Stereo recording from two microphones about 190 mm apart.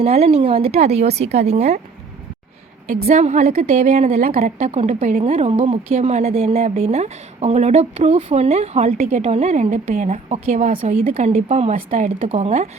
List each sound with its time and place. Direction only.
0.0 s speech: 30° right (ahead or behind)
3.1 s speech: 40° right (ahead or behind)